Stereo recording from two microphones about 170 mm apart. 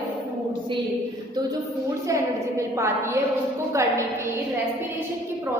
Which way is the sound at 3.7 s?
15° right (ahead or behind).